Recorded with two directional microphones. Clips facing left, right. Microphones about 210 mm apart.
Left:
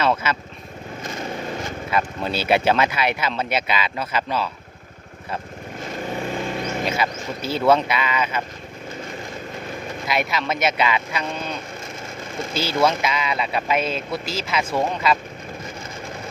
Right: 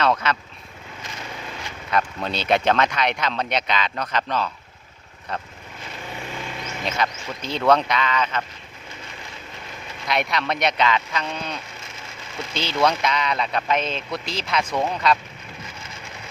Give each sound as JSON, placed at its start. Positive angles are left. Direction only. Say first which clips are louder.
{"t": 0.0, "sound": "speech", "louder": "even", "side_deg": 5}
{"t": 1.0, "sound": "lawn mower", "louder": "left 7 dB", "side_deg": 45}
{"t": 1.9, "sound": "speech", "louder": "even", "side_deg": 5}
{"t": 6.3, "sound": "mouse", "louder": "left 7 dB", "side_deg": 45}
{"t": 6.8, "sound": "speech", "louder": "left 2 dB", "side_deg": 5}
{"t": 10.1, "sound": "speech", "louder": "even", "side_deg": 5}
{"t": 12.5, "sound": "speech", "louder": "left 1 dB", "side_deg": 5}